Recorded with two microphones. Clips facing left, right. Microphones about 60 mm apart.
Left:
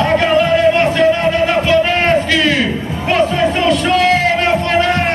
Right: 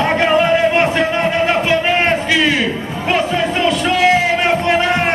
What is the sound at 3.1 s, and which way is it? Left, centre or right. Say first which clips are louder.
Music: left 3 dB; centre.